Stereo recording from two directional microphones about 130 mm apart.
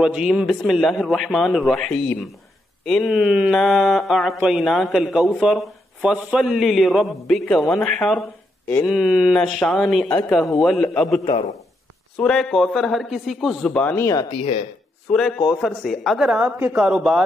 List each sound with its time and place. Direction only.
0.0 s speech: 5° right (ahead or behind)
10.0 s speech: 10° left (ahead or behind)
13.7 s speech: 15° left (ahead or behind)
14.3 s speech: 50° left (ahead or behind)
15.0 s speech: 5° left (ahead or behind)